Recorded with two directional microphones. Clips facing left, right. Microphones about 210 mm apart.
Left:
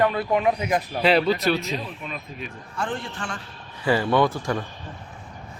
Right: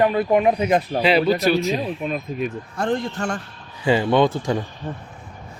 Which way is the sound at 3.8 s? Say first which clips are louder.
Right 3 dB; 20° right (ahead or behind).